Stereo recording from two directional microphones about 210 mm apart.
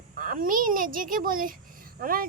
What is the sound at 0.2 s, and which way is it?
A child's voice, 40° right (ahead or behind).